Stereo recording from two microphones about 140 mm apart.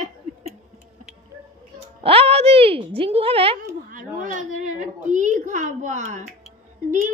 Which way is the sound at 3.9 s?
70° right (ahead or behind).